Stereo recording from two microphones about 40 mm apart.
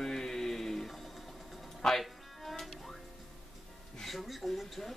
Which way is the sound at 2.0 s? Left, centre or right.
Centre.